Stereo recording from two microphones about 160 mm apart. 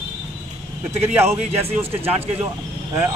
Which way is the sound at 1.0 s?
15° right (ahead or behind).